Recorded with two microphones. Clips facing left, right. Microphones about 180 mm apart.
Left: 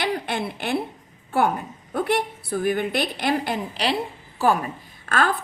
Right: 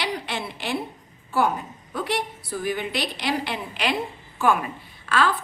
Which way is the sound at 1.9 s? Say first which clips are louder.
Left 4 dB; 55° left (ahead or behind).